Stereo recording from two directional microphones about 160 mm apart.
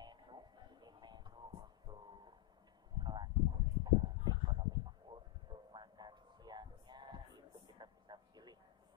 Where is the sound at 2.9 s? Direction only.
25° right (ahead or behind).